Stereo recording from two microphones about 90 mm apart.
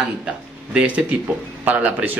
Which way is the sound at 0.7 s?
15° right (ahead or behind).